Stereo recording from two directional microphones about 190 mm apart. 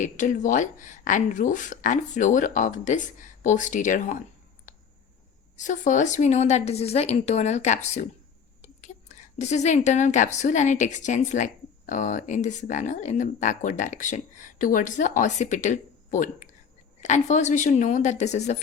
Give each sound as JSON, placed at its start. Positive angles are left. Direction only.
{"t": 0.0, "sound": "a woman's voice", "side_deg": 40}
{"t": 4.7, "sound": "a sound", "side_deg": 45}
{"t": 5.5, "sound": "a woman's voice", "side_deg": 40}